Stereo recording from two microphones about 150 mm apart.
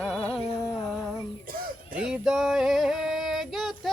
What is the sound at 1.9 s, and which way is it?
Female singing, 5° right (ahead or behind).